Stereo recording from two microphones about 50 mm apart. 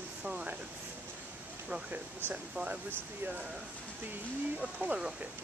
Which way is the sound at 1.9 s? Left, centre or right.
Right.